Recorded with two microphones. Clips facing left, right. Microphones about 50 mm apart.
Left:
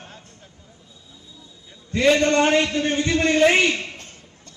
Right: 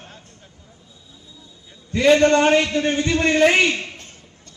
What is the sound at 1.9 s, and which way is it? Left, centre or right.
A man's voice, right.